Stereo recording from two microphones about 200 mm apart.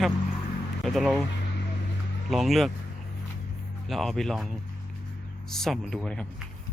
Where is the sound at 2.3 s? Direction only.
Centre (ahead or behind).